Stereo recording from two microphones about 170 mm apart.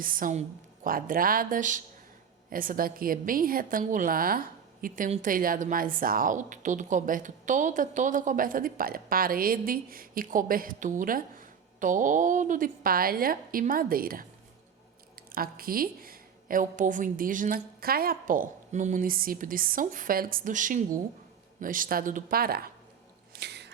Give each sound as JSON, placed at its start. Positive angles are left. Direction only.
{"t": 0.0, "sound": "a woman's voice", "side_deg": -55}
{"t": 15.3, "sound": "a woman's voice", "side_deg": -60}
{"t": 23.3, "sound": "a sound", "side_deg": -80}